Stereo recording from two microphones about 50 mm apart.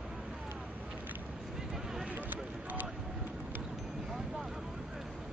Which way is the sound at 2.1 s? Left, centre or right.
Right.